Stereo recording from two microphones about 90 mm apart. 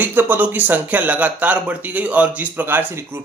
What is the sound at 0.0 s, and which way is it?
Speech, 20° right (ahead or behind).